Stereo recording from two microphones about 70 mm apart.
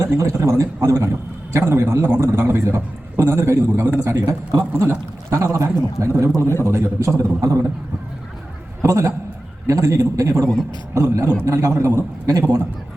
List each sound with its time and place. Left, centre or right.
0.0 s a man's voice: right
8.8 s a man's voice: right